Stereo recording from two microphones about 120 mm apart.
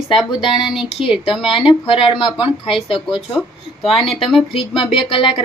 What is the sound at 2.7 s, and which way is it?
Speech, centre (ahead or behind).